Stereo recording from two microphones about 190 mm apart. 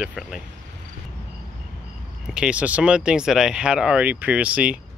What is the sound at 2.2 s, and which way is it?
Speech, 5° right (ahead or behind).